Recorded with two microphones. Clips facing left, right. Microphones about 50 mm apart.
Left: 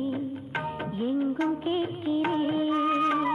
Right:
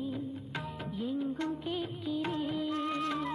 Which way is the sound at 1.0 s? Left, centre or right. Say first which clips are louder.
Left 7 dB; left.